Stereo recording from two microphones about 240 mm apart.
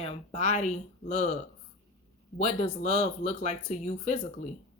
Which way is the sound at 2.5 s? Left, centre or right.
Left.